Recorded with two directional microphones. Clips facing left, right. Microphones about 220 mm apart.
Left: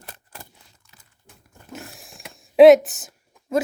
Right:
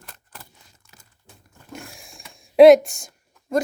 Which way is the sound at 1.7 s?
5° left (ahead or behind).